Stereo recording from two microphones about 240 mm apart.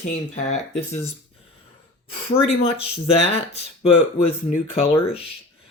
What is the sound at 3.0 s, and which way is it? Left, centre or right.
Speech, left.